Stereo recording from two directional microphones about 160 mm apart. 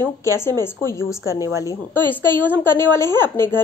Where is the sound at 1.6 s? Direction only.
15° left (ahead or behind).